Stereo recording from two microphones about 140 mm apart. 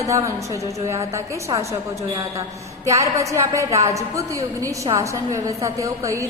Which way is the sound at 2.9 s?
20° right (ahead or behind).